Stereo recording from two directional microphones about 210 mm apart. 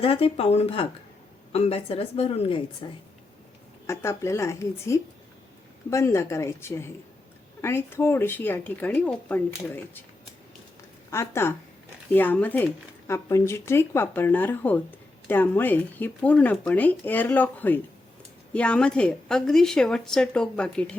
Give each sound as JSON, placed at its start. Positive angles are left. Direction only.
{"t": 0.0, "sound": "a woman's voice", "side_deg": 25}
{"t": 3.8, "sound": "speech", "side_deg": 15}
{"t": 11.1, "sound": "a woman's voice", "side_deg": 10}